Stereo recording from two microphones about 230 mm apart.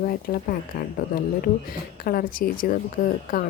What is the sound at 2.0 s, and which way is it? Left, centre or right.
Speech, left.